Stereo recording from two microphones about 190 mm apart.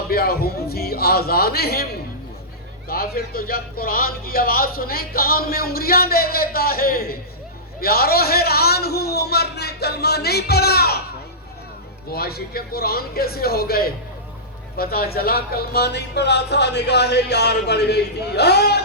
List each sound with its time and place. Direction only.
0.1 s a man's voice: 55° left (ahead or behind)
12.1 s speech: 55° left (ahead or behind)